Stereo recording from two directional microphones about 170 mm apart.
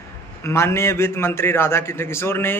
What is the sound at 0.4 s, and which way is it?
A man's voice, 15° left (ahead or behind).